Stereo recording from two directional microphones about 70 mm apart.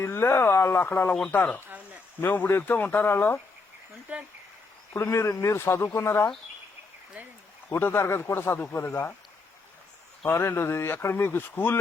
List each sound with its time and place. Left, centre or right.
0.0 s speech: left
1.6 s a sound: right
2.2 s speech: left
4.1 s speech: right
4.9 s speech: left
7.8 s speech: left
10.2 s speech: left